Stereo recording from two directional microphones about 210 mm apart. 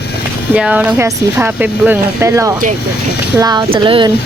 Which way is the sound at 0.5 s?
5° right (ahead or behind).